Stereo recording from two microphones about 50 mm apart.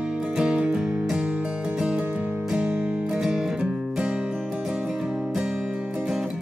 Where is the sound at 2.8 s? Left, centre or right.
Right.